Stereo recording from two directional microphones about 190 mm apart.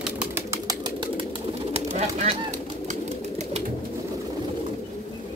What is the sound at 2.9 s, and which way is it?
Pigeon, 35° right (ahead or behind).